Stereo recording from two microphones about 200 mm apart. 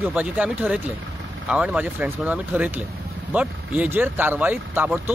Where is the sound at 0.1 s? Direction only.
10° right (ahead or behind).